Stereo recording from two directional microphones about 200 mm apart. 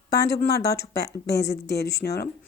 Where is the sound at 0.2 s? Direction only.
50° left (ahead or behind).